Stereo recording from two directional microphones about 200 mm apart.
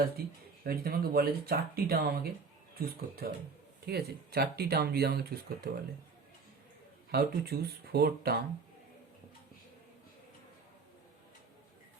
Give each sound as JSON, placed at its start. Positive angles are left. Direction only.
{"t": 0.0, "sound": "speech", "side_deg": -50}
{"t": 7.1, "sound": "speech", "side_deg": -50}